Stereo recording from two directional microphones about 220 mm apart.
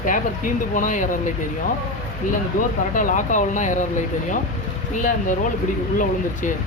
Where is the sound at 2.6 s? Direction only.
40° left (ahead or behind).